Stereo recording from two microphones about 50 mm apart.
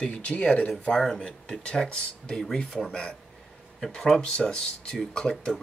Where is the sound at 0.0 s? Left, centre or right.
Left.